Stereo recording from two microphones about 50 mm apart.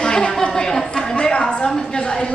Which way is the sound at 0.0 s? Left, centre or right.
Centre.